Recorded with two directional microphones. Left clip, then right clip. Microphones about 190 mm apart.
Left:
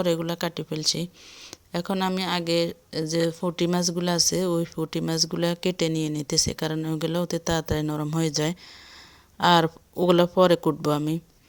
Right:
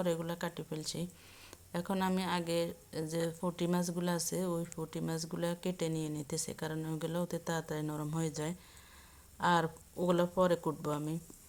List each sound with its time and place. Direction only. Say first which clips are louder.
0.0 s speech: left 10 dB; 35° left (ahead or behind)